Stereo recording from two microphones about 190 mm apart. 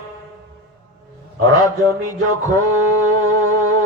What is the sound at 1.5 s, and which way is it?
Speech, 20° left (ahead or behind).